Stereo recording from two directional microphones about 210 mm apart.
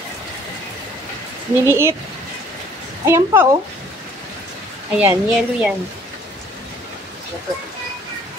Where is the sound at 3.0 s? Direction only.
15° right (ahead or behind).